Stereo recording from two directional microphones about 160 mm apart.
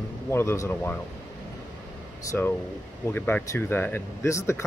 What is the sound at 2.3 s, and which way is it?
Speech, 15° left (ahead or behind).